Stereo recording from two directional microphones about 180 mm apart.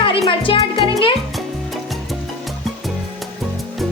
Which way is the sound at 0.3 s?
30° left (ahead or behind).